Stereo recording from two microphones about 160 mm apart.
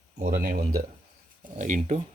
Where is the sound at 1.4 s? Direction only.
50° right (ahead or behind).